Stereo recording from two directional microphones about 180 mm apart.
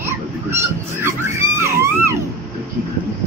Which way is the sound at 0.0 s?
15° right (ahead or behind).